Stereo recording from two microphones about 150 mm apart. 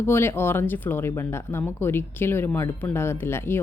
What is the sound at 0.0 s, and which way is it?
Speech, 15° left (ahead or behind).